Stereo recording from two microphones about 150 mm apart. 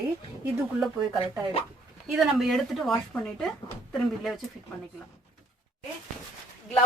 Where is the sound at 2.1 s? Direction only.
Centre (ahead or behind).